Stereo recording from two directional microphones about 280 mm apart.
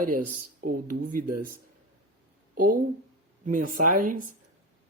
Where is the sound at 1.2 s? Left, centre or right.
Right.